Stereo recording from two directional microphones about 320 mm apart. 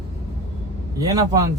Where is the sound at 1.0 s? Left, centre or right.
Centre.